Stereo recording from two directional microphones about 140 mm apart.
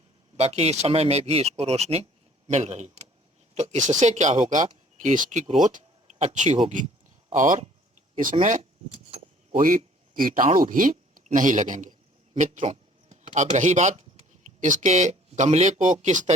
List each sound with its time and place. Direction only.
0.3 s speech: 50° right (ahead or behind)
7.3 s speech: 70° right (ahead or behind)
9.0 s keys jangling: 45° right (ahead or behind)
9.6 s speech: 75° right (ahead or behind); by 16.3 s 55° right (ahead or behind)